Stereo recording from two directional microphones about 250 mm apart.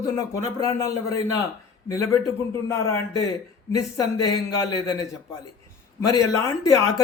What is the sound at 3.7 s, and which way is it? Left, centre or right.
A man's voice, centre.